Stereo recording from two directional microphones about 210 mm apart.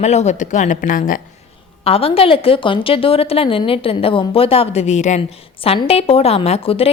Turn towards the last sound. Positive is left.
turn(degrees=25)  # may be behind; listen again after turning